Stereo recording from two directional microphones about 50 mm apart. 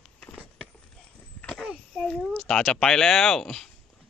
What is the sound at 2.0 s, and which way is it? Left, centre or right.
Speech, centre.